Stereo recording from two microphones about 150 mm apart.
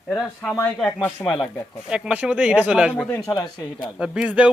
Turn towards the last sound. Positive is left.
turn(degrees=-10)  # may be behind; listen again after turning